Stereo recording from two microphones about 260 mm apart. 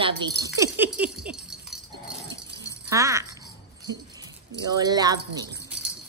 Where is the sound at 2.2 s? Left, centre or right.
Centre.